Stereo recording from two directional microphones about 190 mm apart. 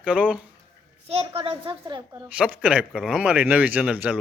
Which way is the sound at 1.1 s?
30° right (ahead or behind).